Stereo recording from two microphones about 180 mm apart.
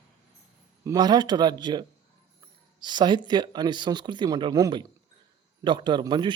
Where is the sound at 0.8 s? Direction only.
20° right (ahead or behind).